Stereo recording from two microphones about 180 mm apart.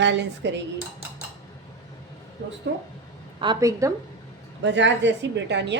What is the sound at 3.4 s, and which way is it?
Speech, 20° right (ahead or behind).